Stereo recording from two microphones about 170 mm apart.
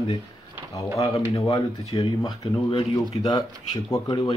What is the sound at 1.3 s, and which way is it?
Speech, 20° left (ahead or behind).